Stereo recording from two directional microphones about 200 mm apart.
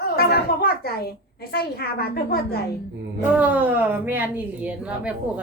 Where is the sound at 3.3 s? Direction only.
5° right (ahead or behind).